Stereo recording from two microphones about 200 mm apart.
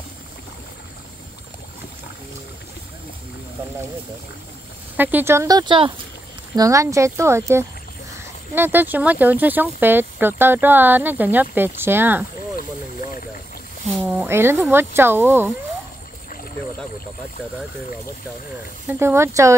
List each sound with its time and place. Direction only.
4.9 s speech: 10° right (ahead or behind)
12.5 s vehicle: 45° left (ahead or behind)
14.0 s speech: 10° right (ahead or behind)
18.9 s speech: 10° right (ahead or behind)